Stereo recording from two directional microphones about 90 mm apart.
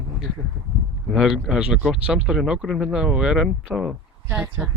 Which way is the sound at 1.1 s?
5° right (ahead or behind).